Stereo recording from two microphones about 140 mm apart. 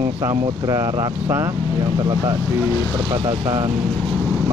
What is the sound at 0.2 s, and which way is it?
Speech, 25° right (ahead or behind).